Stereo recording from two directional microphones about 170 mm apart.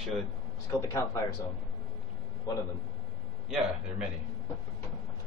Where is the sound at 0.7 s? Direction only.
15° left (ahead or behind).